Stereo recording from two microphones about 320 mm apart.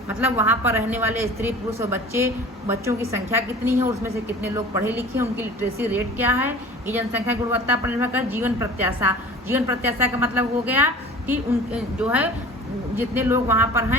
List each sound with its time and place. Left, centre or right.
0.1 s a woman's voice: centre